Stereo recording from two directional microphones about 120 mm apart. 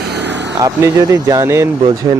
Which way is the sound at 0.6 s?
25° right (ahead or behind).